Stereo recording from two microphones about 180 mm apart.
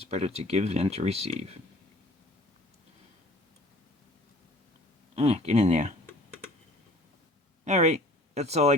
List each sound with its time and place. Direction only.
0.0 s speech: 35° right (ahead or behind)
5.1 s speech: 35° right (ahead or behind)
7.6 s speech: 40° right (ahead or behind)